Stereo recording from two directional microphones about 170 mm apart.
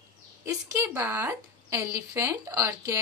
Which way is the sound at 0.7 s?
10° right (ahead or behind).